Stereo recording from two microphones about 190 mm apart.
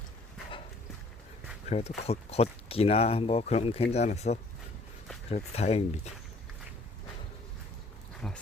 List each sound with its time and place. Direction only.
1.6 s speech: 35° left (ahead or behind)
8.2 s speech: 5° left (ahead or behind)